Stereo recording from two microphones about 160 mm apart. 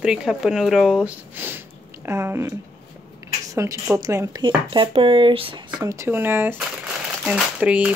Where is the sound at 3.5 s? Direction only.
20° right (ahead or behind).